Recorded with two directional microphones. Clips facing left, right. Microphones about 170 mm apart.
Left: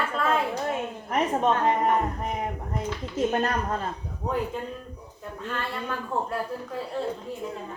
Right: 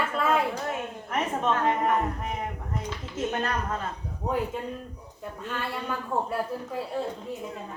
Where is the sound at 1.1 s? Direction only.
35° left (ahead or behind).